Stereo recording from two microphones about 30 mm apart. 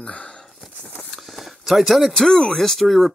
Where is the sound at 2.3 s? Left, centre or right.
Left.